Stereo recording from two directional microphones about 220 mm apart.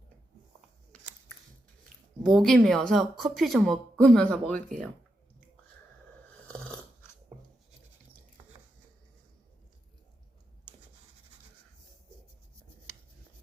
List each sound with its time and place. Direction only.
2.2 s a woman's voice: centre (ahead or behind)
6.5 s dog: 5° left (ahead or behind)